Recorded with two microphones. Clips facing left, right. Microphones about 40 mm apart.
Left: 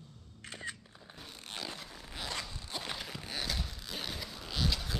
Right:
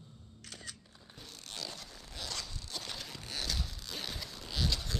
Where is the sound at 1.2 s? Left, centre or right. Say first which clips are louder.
Left 2 dB; left.